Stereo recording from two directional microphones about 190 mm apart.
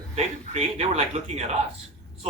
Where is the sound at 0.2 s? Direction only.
30° right (ahead or behind).